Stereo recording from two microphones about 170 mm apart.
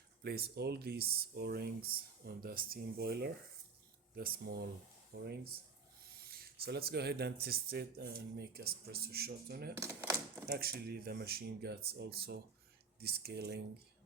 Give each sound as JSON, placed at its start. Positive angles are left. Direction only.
{"t": 0.2, "sound": "speech", "side_deg": -65}
{"t": 9.7, "sound": "speech", "side_deg": -15}
{"t": 10.4, "sound": "speech", "side_deg": -65}